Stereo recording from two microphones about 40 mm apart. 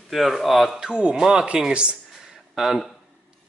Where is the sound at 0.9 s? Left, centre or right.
Right.